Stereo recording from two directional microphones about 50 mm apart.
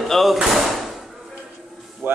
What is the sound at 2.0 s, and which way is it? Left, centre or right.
Speech, right.